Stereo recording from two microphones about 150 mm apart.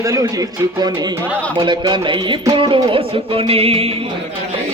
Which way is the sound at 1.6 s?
30° right (ahead or behind).